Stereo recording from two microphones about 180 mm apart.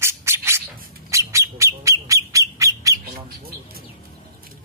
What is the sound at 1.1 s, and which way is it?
Bird, 15° right (ahead or behind).